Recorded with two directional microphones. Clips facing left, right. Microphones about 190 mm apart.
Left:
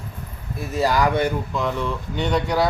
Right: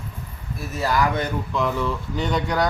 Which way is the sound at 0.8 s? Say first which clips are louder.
Left 2 dB; 15° left (ahead or behind).